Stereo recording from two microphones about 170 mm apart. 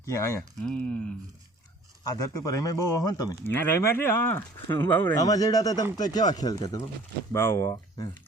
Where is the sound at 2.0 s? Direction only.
20° left (ahead or behind).